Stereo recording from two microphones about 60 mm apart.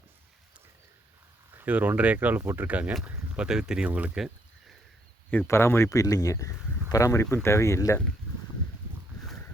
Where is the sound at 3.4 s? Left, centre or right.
Centre.